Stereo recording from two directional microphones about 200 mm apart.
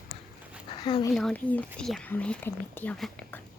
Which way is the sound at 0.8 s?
25° left (ahead or behind).